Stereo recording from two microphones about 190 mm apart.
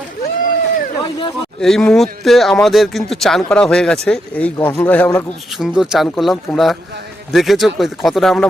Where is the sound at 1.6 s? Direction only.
5° left (ahead or behind).